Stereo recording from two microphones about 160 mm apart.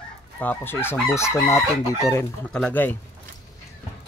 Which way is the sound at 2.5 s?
5° left (ahead or behind).